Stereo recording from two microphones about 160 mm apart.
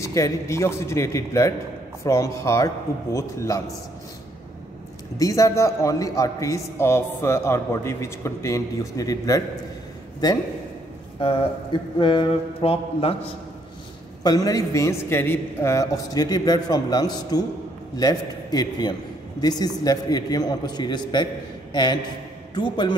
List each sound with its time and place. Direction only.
0.0 s a man's voice: 20° left (ahead or behind)
5.1 s a man's voice: 20° left (ahead or behind)
11.1 s speech: 35° left (ahead or behind)
14.2 s a man's voice: 25° left (ahead or behind)
22.5 s a man's voice: 30° left (ahead or behind)